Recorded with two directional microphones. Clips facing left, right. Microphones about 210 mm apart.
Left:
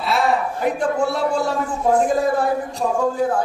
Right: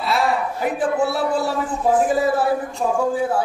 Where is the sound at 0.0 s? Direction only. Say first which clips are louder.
Left 1 dB; centre (ahead or behind).